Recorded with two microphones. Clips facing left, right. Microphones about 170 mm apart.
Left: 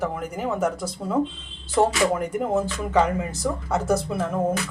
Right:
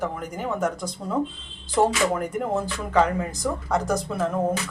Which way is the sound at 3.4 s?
5° left (ahead or behind).